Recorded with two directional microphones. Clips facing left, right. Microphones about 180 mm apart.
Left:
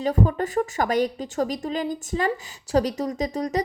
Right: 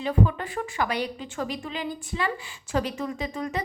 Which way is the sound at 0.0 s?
40° left (ahead or behind).